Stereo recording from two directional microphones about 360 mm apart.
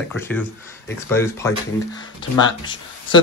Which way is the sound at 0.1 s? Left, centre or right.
Centre.